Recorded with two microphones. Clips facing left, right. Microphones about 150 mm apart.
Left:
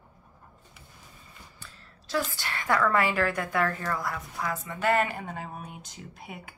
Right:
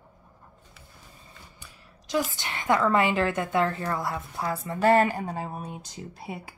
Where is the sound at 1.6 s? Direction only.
15° right (ahead or behind).